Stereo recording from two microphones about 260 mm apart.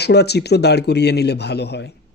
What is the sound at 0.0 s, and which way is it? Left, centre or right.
Speech, left.